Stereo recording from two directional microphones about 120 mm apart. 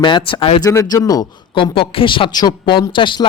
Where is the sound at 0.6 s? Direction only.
30° left (ahead or behind).